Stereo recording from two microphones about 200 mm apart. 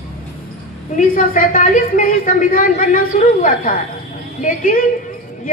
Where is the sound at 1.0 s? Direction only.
40° left (ahead or behind).